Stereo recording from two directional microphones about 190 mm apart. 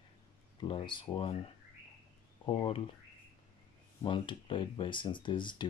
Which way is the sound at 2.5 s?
30° left (ahead or behind).